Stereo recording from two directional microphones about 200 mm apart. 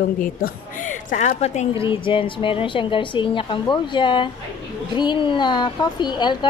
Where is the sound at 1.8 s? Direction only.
25° left (ahead or behind).